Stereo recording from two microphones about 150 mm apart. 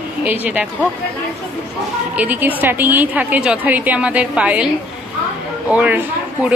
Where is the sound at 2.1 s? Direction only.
10° right (ahead or behind).